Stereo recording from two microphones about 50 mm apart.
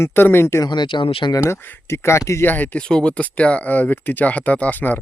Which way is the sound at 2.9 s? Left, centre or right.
Left.